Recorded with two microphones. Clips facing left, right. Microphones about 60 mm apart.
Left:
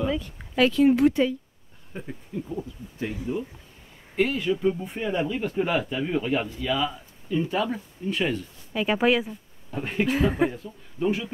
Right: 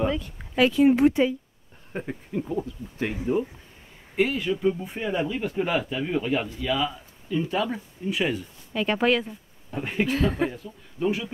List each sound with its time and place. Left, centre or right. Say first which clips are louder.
0.1 s a sound: left 1 dB; centre
0.7 s speech: right 1 dB; centre
2.0 s speech: right 4 dB; right
4.1 s speech: even; centre
8.7 s speech: left 1 dB; centre
10.1 s speech: left 2 dB; centre